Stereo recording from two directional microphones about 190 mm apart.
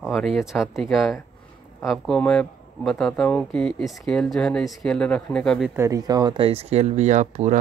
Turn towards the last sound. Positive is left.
turn(degrees=-40)  # may be behind; listen again after turning